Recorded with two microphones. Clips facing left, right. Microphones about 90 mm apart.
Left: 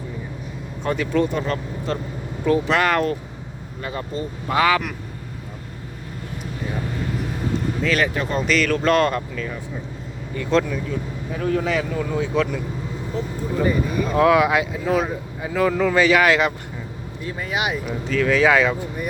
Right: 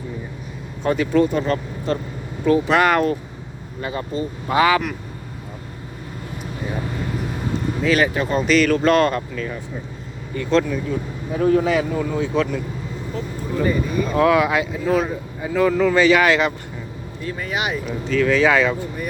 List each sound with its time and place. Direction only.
0.8 s speech: 5° right (ahead or behind)
7.9 s speech: 10° right (ahead or behind)
11.3 s speech: 30° right (ahead or behind)
11.6 s speech: 15° right (ahead or behind)
12.1 s speech: centre (ahead or behind)
13.6 s speech: 10° left (ahead or behind)